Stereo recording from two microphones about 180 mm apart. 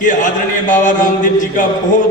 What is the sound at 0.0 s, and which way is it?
A man's voice, 45° left (ahead or behind).